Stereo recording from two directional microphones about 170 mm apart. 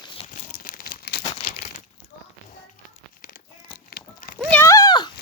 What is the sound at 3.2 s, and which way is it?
Crumpling, 55° left (ahead or behind).